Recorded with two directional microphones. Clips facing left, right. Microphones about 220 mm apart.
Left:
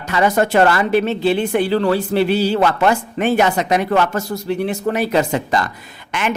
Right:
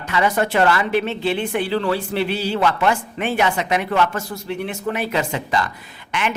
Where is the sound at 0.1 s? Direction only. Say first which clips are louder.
Left 4 dB; 40° left (ahead or behind).